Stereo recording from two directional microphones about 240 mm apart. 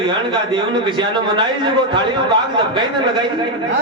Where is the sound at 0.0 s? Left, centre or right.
Centre.